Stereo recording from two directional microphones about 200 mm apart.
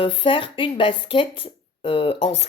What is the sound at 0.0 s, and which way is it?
Speech, 25° left (ahead or behind).